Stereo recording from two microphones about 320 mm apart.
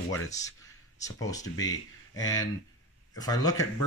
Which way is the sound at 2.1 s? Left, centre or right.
Centre.